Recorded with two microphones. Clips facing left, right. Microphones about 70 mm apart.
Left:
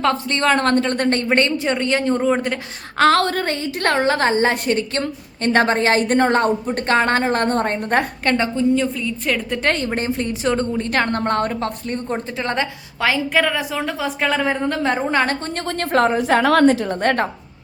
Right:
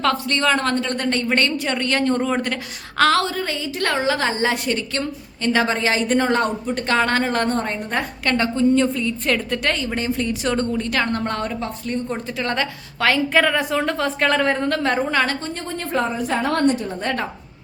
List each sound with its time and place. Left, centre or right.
0.0 s a woman's voice: left
0.4 s a woman's voice: left
1.3 s a woman's voice: left
3.2 s a woman's voice: left
8.2 s a woman's voice: left
8.5 s a woman's voice: centre
9.6 s a woman's voice: left
10.8 s a woman's voice: left
12.1 s a woman's voice: left
13.0 s a woman's voice: centre
15.1 s a woman's voice: left
15.5 s a woman's voice: left